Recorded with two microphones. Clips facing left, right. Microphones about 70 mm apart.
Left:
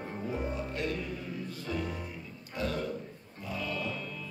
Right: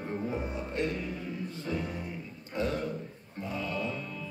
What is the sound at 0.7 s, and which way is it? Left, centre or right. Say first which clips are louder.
Music: right 2 dB; right.